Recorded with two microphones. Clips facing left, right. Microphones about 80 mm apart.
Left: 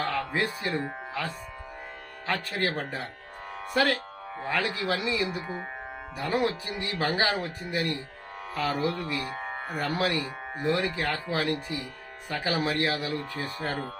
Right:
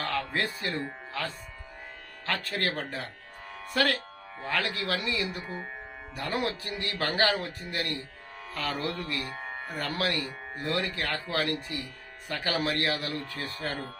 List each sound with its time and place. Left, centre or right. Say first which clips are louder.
0.0 s speech: left 2 dB; centre
9.3 s music: left 3 dB; left
9.6 s speech: left 3 dB; centre